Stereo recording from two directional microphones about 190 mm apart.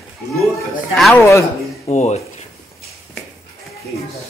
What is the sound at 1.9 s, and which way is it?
Speech, 35° left (ahead or behind).